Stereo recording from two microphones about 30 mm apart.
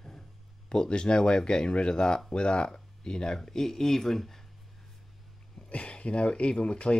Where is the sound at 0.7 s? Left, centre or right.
Left; by 4.4 s centre.